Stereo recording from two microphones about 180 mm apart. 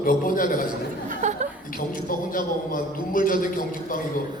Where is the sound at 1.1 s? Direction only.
45° right (ahead or behind).